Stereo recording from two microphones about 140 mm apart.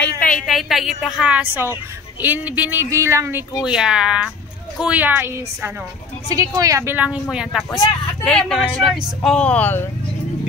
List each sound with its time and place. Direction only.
0.4 s a woman's voice: centre (ahead or behind); by 3.4 s 15° right (ahead or behind)
3.6 s a woman's voice: 5° right (ahead or behind); by 9.8 s 15° left (ahead or behind)